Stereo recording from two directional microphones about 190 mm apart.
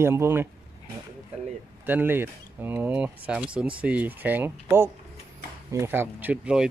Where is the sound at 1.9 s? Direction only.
10° right (ahead or behind).